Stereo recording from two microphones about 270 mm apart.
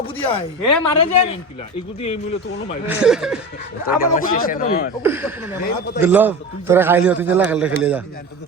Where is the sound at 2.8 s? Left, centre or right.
Centre.